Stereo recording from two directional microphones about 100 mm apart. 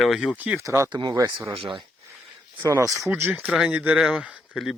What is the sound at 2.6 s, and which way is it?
Speech, 30° right (ahead or behind).